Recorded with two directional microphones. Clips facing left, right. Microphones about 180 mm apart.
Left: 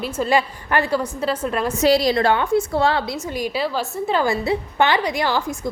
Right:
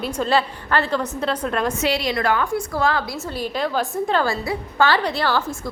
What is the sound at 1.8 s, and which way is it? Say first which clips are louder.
A woman's voice: left 5 dB; 35° left (ahead or behind).